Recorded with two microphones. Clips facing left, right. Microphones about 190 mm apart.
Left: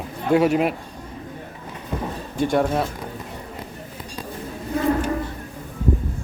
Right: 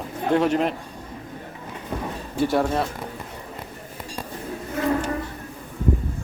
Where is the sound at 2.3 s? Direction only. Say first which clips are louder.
Left 1 dB; 5° right (ahead or behind).